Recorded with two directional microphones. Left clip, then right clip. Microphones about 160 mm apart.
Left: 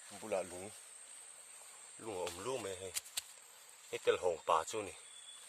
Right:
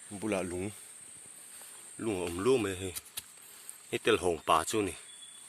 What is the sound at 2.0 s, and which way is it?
Speech, 5° right (ahead or behind).